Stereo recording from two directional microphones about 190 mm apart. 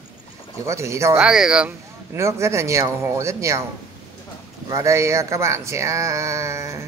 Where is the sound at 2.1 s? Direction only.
15° right (ahead or behind).